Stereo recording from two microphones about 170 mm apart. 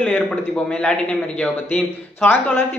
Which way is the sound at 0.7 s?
5° left (ahead or behind).